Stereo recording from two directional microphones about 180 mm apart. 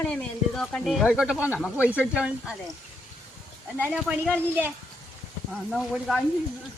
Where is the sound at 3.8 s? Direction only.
Centre (ahead or behind).